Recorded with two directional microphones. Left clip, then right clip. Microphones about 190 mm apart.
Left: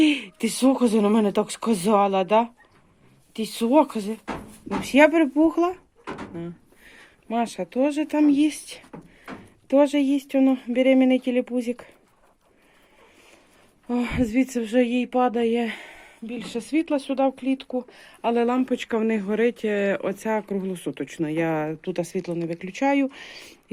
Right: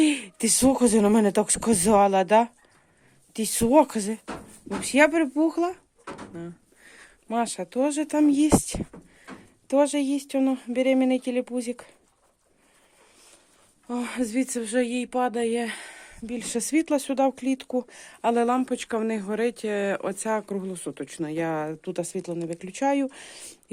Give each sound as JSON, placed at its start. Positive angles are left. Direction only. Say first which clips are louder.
{"t": 0.0, "sound": "speech", "louder": "left 2 dB", "side_deg": -25}
{"t": 4.8, "sound": "speech", "louder": "left 3 dB", "side_deg": -10}
{"t": 9.6, "sound": "speech", "louder": "left 3 dB", "side_deg": -5}
{"t": 13.8, "sound": "speech", "louder": "left 4 dB", "side_deg": 0}
{"t": 15.8, "sound": "a sound", "louder": "even", "side_deg": -15}
{"t": 16.5, "sound": "speech", "louder": "even", "side_deg": -35}